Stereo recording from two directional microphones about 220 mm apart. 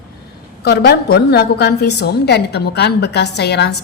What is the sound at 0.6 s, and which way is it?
A woman's voice, 50° left (ahead or behind).